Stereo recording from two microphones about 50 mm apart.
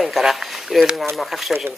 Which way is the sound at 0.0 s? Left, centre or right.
Centre.